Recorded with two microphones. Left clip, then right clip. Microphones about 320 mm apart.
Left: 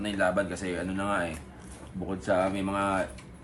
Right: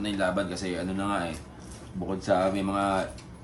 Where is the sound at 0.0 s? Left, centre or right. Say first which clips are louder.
Left 1 dB; centre.